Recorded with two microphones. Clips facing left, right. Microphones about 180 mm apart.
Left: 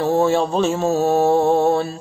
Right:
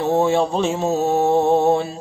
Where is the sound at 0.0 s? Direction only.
15° right (ahead or behind).